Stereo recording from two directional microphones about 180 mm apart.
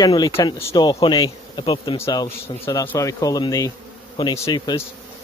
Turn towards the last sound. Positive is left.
turn(degrees=25)  # may be behind; listen again after turning